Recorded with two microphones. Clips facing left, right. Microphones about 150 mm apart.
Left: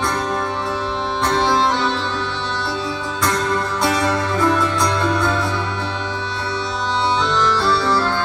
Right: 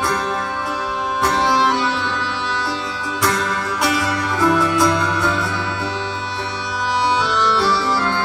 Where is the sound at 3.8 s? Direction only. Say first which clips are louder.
Even; 20° left (ahead or behind).